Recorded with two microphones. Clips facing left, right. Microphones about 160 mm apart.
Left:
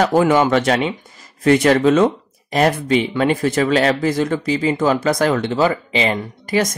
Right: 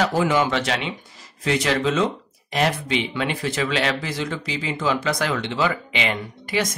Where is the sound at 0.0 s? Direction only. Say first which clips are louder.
Left 6 dB; 50° left (ahead or behind).